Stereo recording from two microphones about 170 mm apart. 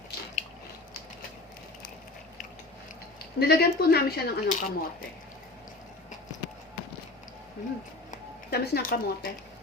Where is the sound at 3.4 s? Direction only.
65° left (ahead or behind).